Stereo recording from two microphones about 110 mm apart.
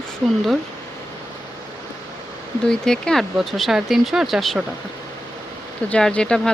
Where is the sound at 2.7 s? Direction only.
5° left (ahead or behind).